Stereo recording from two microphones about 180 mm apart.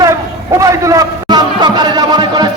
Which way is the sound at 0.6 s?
20° right (ahead or behind).